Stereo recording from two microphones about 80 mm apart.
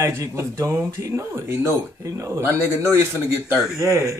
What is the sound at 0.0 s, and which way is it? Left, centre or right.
Speech, right.